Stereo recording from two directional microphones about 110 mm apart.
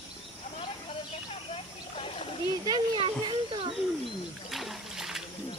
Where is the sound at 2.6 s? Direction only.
50° right (ahead or behind).